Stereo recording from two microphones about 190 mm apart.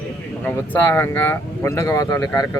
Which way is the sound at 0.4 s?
10° left (ahead or behind).